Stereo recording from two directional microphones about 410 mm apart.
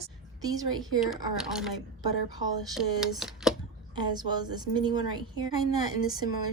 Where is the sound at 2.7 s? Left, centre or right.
Centre.